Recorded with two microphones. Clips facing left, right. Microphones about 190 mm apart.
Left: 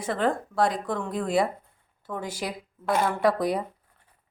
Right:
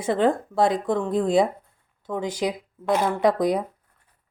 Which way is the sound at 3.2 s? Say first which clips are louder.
Right 3 dB; 15° right (ahead or behind).